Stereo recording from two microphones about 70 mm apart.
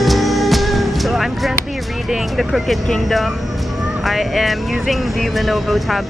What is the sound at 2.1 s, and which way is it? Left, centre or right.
Speech, centre.